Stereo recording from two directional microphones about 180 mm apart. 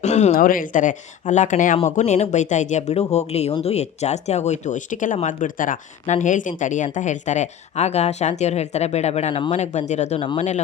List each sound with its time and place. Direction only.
0.0 s speech: 40° left (ahead or behind)